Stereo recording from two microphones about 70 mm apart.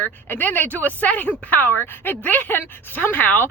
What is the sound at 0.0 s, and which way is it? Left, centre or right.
Speech, left.